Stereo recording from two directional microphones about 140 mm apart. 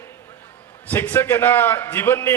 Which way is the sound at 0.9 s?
15° left (ahead or behind).